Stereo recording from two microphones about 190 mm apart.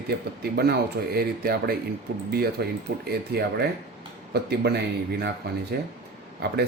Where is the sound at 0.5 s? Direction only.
55° right (ahead or behind).